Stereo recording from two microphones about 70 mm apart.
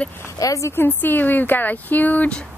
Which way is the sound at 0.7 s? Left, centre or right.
Left.